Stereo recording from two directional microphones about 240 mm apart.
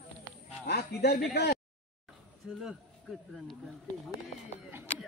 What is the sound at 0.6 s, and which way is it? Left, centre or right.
Speech, left.